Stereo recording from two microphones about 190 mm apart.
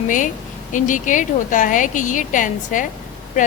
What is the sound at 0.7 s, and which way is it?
A woman's voice, 40° left (ahead or behind).